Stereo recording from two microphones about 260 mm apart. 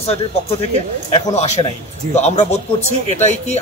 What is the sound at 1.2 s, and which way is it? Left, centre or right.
Speech, left.